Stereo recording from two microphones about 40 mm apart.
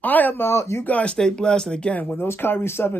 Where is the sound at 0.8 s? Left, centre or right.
Left.